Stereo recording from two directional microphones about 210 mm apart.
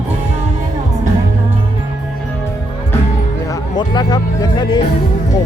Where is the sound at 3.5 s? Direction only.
20° left (ahead or behind).